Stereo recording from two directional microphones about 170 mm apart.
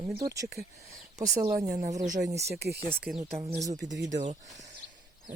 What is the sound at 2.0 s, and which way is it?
Speech, 50° right (ahead or behind).